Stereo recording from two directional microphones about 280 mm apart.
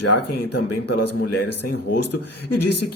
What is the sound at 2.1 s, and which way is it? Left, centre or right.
Speech, left.